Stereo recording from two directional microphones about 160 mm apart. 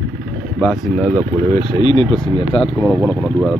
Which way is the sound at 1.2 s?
40° right (ahead or behind).